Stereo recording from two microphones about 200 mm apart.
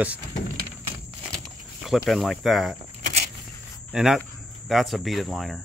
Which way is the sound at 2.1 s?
Centre (ahead or behind).